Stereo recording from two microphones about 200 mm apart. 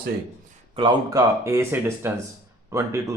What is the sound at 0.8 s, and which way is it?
Speech, 25° right (ahead or behind).